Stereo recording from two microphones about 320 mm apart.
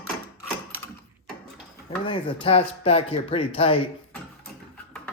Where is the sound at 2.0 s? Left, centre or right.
Centre.